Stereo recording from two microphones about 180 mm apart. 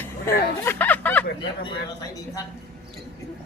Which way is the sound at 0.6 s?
10° left (ahead or behind).